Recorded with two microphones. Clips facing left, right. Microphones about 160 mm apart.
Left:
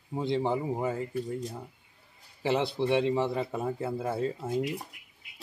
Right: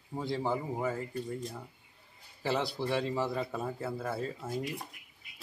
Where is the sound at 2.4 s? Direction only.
20° left (ahead or behind).